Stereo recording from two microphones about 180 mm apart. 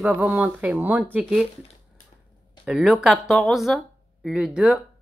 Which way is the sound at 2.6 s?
Centre (ahead or behind).